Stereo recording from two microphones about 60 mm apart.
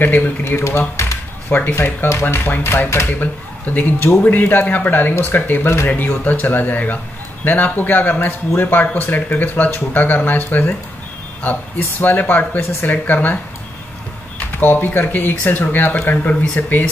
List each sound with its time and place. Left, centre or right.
0.0 s speech: left
3.2 s speech: left
12.0 s speech: left
14.6 s speech: left